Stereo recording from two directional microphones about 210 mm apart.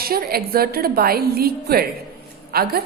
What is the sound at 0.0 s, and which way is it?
A woman's voice, 45° right (ahead or behind).